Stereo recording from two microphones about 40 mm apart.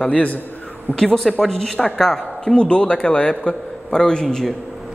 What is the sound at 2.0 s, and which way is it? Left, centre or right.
Speech, centre.